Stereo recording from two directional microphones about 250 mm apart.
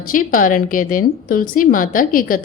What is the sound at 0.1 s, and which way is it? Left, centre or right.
Speech, left.